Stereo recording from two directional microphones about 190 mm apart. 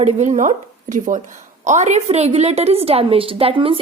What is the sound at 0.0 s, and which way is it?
A woman's voice, 35° right (ahead or behind).